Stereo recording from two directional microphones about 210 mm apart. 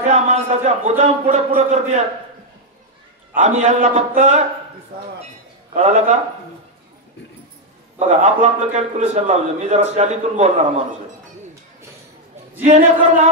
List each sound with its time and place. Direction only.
0.0 s a man's voice: 30° right (ahead or behind)
3.3 s a man's voice: 35° right (ahead or behind)
5.7 s a man's voice: 30° right (ahead or behind)
8.1 s a man's voice: 30° right (ahead or behind)
12.6 s a man's voice: 35° right (ahead or behind)